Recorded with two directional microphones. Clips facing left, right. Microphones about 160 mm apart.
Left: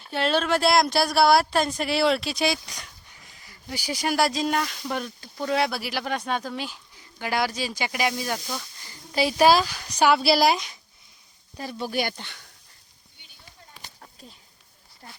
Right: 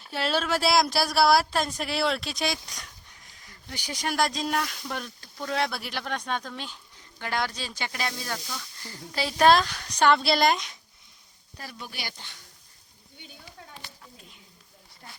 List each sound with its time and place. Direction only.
0.0 s speech: centre (ahead or behind)
11.5 s speech: 25° left (ahead or behind)
11.9 s speech: 55° left (ahead or behind)